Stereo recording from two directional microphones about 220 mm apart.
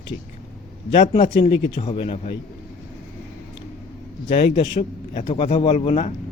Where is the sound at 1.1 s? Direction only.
30° left (ahead or behind).